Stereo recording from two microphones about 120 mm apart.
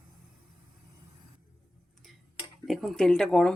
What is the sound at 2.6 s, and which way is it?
Speech, centre (ahead or behind).